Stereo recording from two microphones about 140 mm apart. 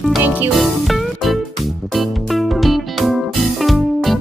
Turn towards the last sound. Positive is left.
turn(degrees=0)  # may be behind; listen again after turning